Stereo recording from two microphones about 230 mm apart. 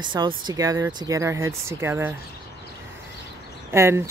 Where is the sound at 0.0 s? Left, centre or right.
Centre.